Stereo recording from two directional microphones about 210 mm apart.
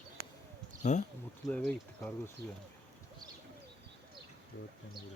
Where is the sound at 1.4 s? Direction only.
Centre (ahead or behind).